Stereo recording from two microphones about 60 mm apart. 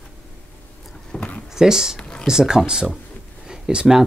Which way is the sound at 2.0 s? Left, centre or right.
Centre.